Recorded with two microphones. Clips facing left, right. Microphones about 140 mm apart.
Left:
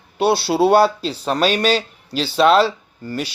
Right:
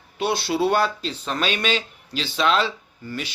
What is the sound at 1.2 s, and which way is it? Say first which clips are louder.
Speech: left 7 dB; 40° left (ahead or behind).